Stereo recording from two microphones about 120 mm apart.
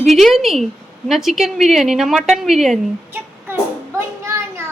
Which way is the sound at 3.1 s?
20° right (ahead or behind).